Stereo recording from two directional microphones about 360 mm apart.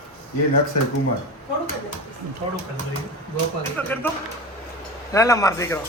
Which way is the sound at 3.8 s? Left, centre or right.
Centre.